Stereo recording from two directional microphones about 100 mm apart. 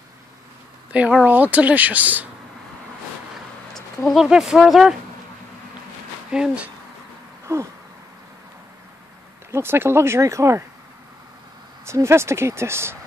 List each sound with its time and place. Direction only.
0.9 s speech: 15° right (ahead or behind)
3.7 s speech: 5° left (ahead or behind)
6.3 s speech: 10° right (ahead or behind)
7.5 s speech: 25° right (ahead or behind)
9.5 s speech: 25° right (ahead or behind)
11.8 s speech: 30° right (ahead or behind)